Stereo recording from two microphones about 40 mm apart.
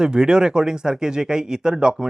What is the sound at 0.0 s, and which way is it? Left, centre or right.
Speech, centre.